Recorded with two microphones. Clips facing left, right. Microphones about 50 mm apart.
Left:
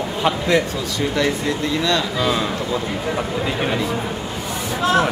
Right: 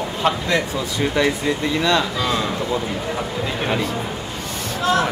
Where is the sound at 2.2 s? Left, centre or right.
Centre.